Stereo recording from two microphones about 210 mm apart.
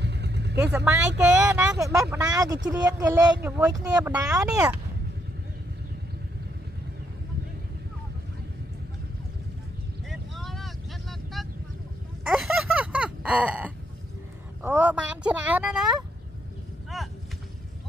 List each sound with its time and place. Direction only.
0.0 s vehicle: 55° right (ahead or behind)
0.7 s speech: 15° right (ahead or behind)
10.0 s vehicle: centre (ahead or behind)
12.3 s a sound: centre (ahead or behind)
14.6 s speech: 10° right (ahead or behind)
16.9 s artillery fire: centre (ahead or behind)